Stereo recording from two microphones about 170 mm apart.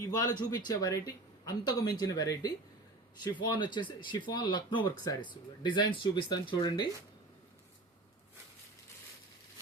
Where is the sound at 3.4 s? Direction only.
25° left (ahead or behind).